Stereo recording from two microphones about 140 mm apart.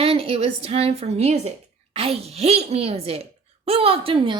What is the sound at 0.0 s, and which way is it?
A woman's voice, 40° right (ahead or behind).